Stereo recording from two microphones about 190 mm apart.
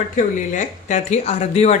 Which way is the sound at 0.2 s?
40° left (ahead or behind).